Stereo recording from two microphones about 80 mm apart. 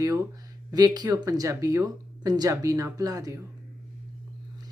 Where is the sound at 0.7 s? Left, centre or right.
Right.